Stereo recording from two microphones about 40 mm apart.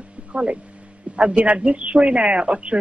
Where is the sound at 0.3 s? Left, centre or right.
Right.